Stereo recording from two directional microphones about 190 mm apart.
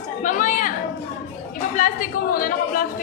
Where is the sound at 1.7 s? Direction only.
45° left (ahead or behind).